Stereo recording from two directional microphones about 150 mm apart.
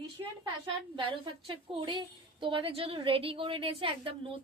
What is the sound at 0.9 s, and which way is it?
A woman's voice, 35° right (ahead or behind).